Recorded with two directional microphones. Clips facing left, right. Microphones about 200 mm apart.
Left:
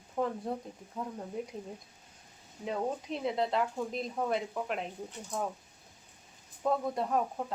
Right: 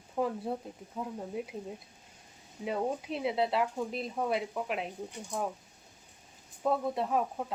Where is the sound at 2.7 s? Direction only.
10° right (ahead or behind).